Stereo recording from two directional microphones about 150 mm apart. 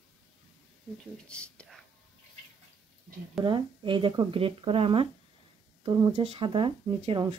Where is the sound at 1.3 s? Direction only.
5° left (ahead or behind).